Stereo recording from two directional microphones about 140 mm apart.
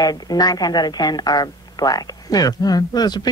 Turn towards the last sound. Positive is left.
turn(degrees=30)  # may be behind; listen again after turning